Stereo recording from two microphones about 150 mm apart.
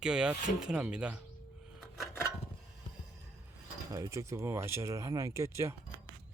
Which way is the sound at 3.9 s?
20° right (ahead or behind).